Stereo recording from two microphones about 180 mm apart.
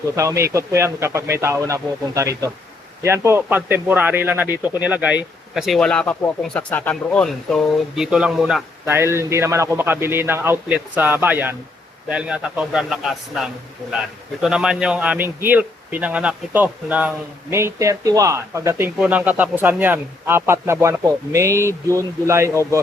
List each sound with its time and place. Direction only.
0.2 s speech: 15° right (ahead or behind)
8.9 s speech: 15° right (ahead or behind)
14.4 s speech: 5° right (ahead or behind)